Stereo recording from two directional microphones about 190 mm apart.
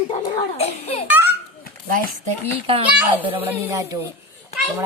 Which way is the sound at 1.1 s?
10° right (ahead or behind).